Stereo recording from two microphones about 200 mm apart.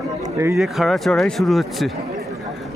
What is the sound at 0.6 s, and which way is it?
Speech, centre (ahead or behind).